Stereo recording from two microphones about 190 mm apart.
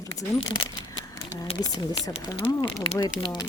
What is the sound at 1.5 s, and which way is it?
Speech, 30° left (ahead or behind).